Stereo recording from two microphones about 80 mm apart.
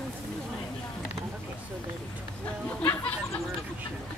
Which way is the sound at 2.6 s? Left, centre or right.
Left.